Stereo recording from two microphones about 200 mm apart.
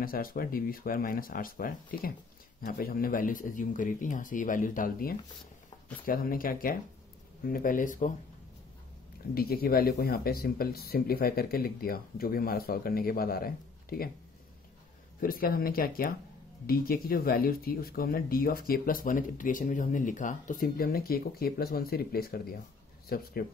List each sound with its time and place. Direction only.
0.0 s speech: 45° left (ahead or behind)
9.3 s speech: 50° left (ahead or behind)
15.1 s speech: 45° left (ahead or behind)